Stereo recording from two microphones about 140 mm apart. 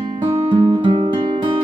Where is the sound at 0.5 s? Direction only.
40° right (ahead or behind).